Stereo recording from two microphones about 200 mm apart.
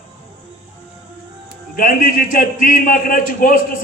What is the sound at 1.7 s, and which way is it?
A man's voice, 45° left (ahead or behind).